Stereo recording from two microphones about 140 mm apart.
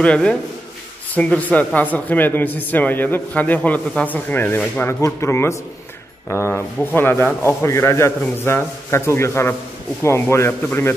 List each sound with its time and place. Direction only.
0.0 s speech: 10° left (ahead or behind)